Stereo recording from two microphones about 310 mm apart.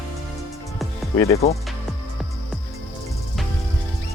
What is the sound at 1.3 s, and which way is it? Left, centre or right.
Speech, centre.